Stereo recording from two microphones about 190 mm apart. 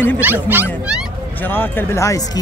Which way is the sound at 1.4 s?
10° left (ahead or behind).